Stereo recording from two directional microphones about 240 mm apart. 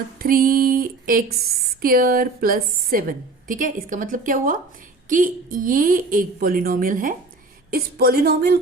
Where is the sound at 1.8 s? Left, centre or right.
Right.